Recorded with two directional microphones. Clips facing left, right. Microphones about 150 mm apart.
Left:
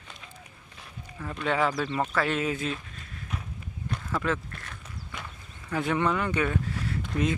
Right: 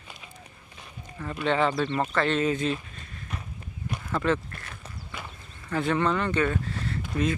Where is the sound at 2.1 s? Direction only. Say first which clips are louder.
Right 3 dB; 5° left (ahead or behind).